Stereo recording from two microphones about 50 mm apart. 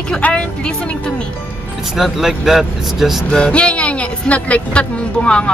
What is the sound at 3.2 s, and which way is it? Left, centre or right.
Speech, centre.